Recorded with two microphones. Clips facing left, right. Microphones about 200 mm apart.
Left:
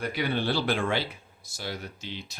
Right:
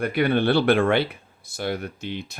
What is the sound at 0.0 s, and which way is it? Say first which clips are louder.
Speech: right 8 dB; 60° right (ahead or behind).